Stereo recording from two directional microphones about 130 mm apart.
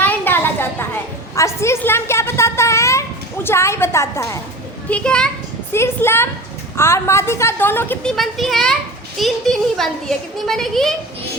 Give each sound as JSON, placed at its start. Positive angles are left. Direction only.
{"t": 0.0, "sound": "a sound", "side_deg": 15}
{"t": 4.9, "sound": "a child's voice", "side_deg": 10}
{"t": 5.7, "sound": "a woman's voice", "side_deg": 20}
{"t": 8.0, "sound": "a woman's voice", "side_deg": 0}